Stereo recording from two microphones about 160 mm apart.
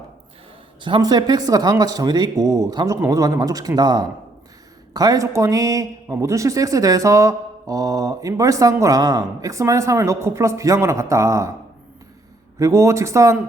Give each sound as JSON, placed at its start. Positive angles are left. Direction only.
{"t": 0.8, "sound": "speech", "side_deg": -30}
{"t": 12.5, "sound": "speech", "side_deg": -20}